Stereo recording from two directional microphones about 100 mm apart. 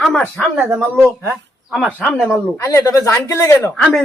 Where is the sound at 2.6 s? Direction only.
35° left (ahead or behind).